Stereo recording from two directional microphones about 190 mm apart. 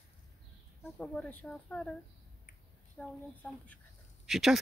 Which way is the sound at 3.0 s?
5° left (ahead or behind).